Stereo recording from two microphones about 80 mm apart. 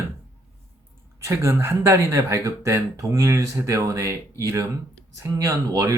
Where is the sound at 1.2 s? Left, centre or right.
Right.